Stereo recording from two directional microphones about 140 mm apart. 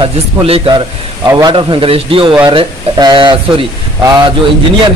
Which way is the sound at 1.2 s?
25° right (ahead or behind).